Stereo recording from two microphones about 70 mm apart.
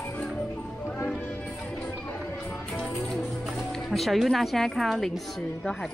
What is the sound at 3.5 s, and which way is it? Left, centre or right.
Speech, centre.